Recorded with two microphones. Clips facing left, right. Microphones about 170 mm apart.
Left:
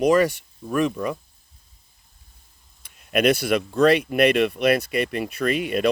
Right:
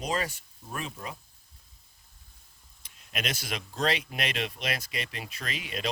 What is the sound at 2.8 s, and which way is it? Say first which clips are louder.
Speech: left 15 dB; 60° left (ahead or behind).